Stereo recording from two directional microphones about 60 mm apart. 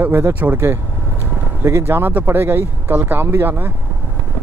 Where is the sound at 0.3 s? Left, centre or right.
Right.